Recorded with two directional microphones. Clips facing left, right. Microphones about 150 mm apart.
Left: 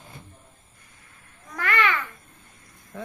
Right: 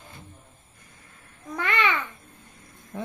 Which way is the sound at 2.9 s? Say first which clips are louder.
Right 2 dB; 15° right (ahead or behind).